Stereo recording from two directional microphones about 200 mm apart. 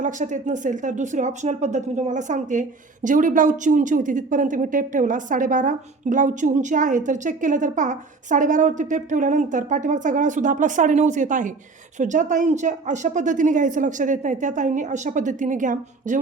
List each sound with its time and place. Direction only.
0.0 s speech: 40° right (ahead or behind)